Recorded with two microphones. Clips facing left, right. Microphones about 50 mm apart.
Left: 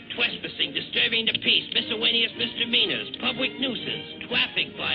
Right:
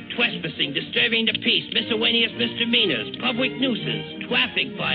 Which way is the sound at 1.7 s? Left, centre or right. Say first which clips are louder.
Right 4 dB; centre.